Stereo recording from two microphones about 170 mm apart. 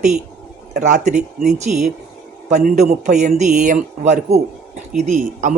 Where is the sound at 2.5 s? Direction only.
45° right (ahead or behind).